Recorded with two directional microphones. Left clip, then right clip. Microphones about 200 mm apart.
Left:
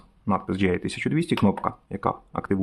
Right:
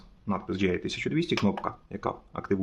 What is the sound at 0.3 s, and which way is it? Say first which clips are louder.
Speech: left 5 dB; 30° left (ahead or behind).